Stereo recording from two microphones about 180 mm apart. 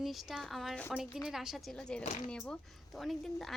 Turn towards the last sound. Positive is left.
turn(degrees=0)  # may be behind; listen again after turning